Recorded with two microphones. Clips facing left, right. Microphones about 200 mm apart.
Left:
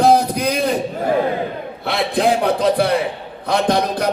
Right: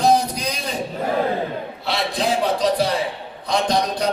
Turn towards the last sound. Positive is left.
turn(degrees=55)  # may be behind; listen again after turning